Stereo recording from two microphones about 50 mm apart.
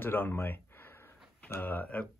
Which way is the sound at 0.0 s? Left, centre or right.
Left.